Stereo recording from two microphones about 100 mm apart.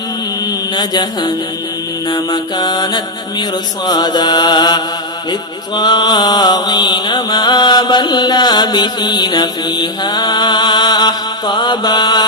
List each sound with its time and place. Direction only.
0.7 s mantra: 45° left (ahead or behind)